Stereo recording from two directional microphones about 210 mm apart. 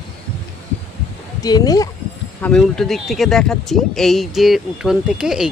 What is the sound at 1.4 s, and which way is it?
Speech, 15° left (ahead or behind).